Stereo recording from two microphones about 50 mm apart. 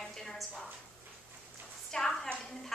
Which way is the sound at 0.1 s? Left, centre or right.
Centre.